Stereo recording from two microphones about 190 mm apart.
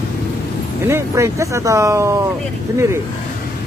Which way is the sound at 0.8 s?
15° right (ahead or behind).